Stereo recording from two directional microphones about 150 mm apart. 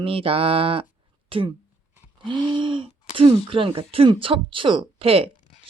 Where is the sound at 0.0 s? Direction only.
40° right (ahead or behind).